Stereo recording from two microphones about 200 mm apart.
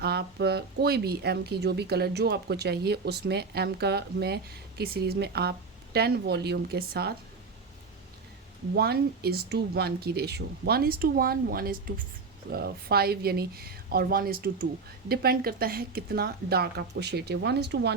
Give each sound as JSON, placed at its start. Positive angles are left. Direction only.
{"t": 0.0, "sound": "speech", "side_deg": -55}
{"t": 8.7, "sound": "speech", "side_deg": -50}